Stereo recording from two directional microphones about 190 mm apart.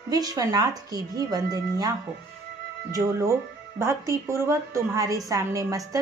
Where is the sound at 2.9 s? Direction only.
15° right (ahead or behind).